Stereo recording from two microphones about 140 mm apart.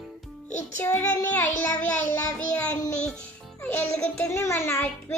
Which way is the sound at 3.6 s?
15° left (ahead or behind).